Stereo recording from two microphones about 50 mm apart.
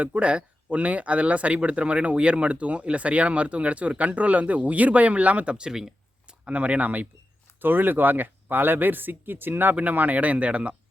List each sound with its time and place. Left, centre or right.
0.0 s speech: right
7.6 s speech: right